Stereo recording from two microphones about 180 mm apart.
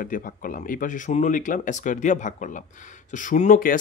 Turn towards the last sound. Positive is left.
turn(degrees=45)  # may be behind; listen again after turning